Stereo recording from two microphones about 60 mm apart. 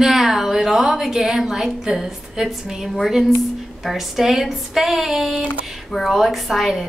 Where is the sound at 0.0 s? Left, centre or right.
Centre.